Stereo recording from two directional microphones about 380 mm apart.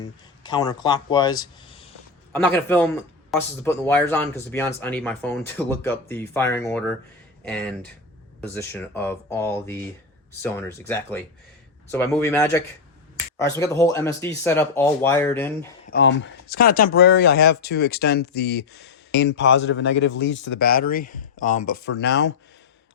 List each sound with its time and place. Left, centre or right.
0.0 s speech: centre
15.9 s speech: left